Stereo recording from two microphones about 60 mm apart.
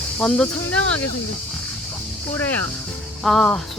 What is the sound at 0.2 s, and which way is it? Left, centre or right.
Speech, centre.